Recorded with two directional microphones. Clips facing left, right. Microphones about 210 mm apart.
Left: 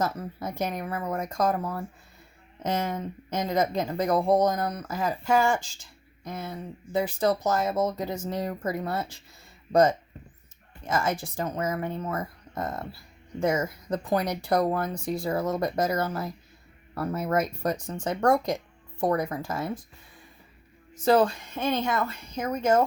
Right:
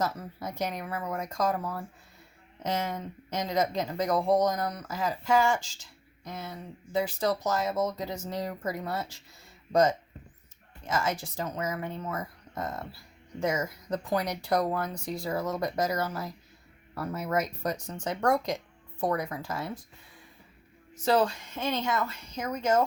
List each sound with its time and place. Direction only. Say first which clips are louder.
0.0 s speech: left 3 dB; 55° left (ahead or behind)
10.8 s speech: left 3 dB; 55° left (ahead or behind)
20.9 s speech: left 4 dB; 50° left (ahead or behind)